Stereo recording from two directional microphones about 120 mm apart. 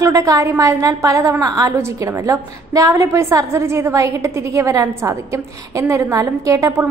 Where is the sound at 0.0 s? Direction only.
25° right (ahead or behind).